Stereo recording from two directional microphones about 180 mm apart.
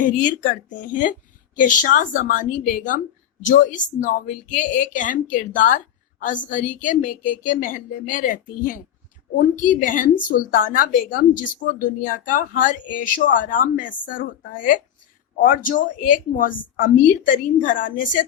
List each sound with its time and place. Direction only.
0.0 s a woman's voice: 45° left (ahead or behind)